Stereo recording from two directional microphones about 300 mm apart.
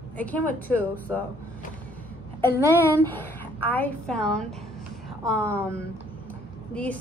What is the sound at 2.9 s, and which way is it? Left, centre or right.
A woman's voice, centre.